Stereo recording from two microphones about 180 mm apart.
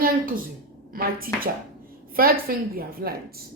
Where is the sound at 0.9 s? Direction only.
50° right (ahead or behind).